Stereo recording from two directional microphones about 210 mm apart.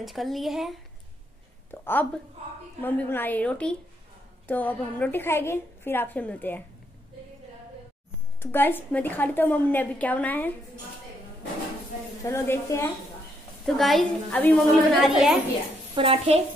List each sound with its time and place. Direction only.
0.0 s a woman's voice: centre (ahead or behind)
1.7 s a woman's voice: 10° left (ahead or behind)
8.4 s a woman's voice: 10° left (ahead or behind)
12.3 s a woman's voice: 15° left (ahead or behind)
13.7 s a woman's voice: centre (ahead or behind)
15.9 s a woman's voice: 25° right (ahead or behind)